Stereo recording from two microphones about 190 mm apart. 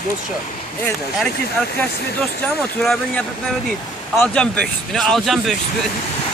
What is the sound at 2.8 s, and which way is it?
Speech, 5° left (ahead or behind).